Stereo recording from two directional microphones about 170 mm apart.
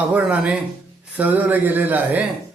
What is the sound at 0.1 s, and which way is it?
A man's voice, 5° right (ahead or behind).